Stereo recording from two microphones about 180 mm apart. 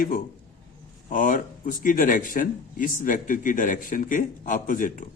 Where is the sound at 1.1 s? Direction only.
50° left (ahead or behind).